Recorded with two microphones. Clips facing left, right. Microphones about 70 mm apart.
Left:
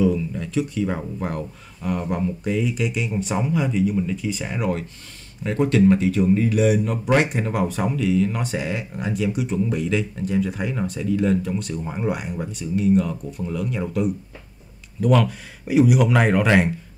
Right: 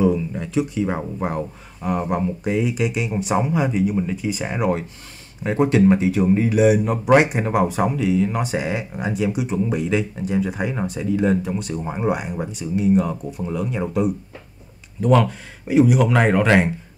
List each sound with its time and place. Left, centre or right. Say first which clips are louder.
0.0 s speech: right 1 dB; right
6.5 s speech: right 3 dB; centre
11.7 s speech: right 2 dB; right
12.1 s speech: right 4 dB; centre
13.0 s speech: right 2 dB; centre
15.0 s speech: right 2 dB; centre